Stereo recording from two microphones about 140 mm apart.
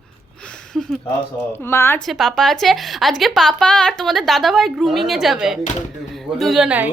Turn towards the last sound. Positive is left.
turn(degrees=-10)  # may be behind; listen again after turning